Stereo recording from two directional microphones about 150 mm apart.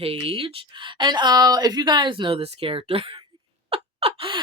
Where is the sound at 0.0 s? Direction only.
40° right (ahead or behind).